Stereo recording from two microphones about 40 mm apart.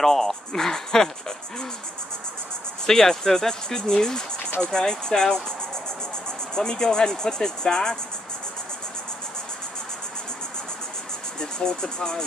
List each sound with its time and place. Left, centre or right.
0.0 s speech: centre
2.9 s speech: centre
6.5 s speech: centre
11.3 s speech: centre